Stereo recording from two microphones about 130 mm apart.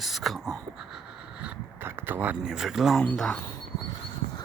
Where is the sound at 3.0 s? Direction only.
10° left (ahead or behind).